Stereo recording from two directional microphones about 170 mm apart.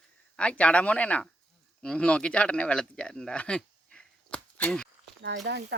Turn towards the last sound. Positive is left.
turn(degrees=-85)